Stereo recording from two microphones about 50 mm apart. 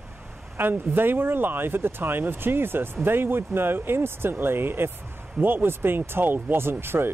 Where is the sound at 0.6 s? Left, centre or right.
Right.